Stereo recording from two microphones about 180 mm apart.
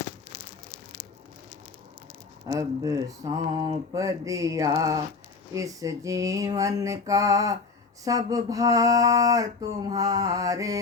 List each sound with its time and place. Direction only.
2.5 s mantra: 20° right (ahead or behind)